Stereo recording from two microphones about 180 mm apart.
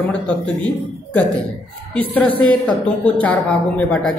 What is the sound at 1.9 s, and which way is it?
A woman's voice, 5° left (ahead or behind).